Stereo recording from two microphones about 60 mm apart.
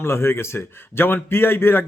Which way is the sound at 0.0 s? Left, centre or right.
Left.